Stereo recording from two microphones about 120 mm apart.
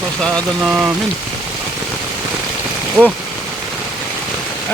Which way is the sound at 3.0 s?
15° right (ahead or behind).